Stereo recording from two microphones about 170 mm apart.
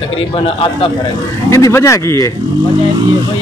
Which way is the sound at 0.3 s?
30° left (ahead or behind).